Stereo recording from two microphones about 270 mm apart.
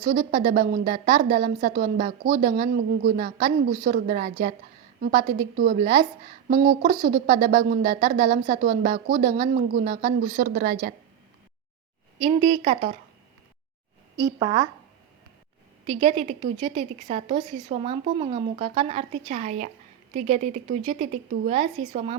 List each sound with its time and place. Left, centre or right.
0.0 s speech: right
5.5 s speech: right
12.2 s a woman's voice: centre
14.3 s speech: centre
15.9 s a woman's voice: right